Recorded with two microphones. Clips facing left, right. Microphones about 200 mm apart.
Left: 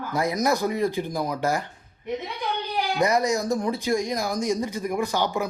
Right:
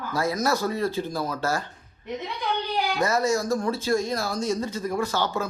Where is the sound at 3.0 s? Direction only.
15° left (ahead or behind).